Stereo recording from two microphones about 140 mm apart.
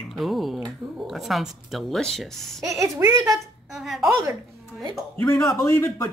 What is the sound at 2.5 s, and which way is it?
Speech, 25° right (ahead or behind).